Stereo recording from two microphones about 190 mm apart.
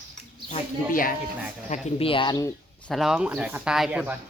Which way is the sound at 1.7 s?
35° left (ahead or behind).